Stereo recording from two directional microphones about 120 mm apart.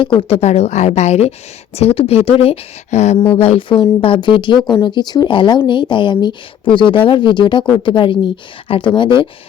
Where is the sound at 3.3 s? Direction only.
55° left (ahead or behind).